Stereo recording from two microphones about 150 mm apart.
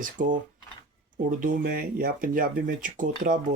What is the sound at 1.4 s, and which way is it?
Speech, 70° right (ahead or behind).